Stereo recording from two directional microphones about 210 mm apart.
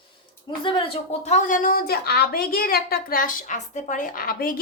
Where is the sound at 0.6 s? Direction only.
25° left (ahead or behind).